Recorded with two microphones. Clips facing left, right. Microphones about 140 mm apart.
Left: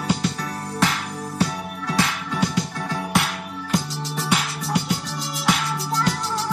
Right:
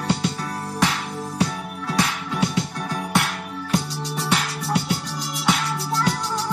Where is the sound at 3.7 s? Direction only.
Centre (ahead or behind).